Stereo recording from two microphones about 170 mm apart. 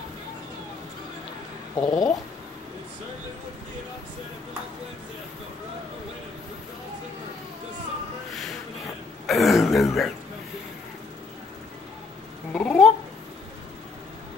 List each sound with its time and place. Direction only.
1.8 s speech: 20° left (ahead or behind)
9.2 s speech: centre (ahead or behind)
12.5 s a sound: 5° left (ahead or behind)